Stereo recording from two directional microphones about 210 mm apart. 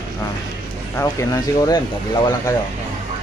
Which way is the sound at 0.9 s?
15° left (ahead or behind).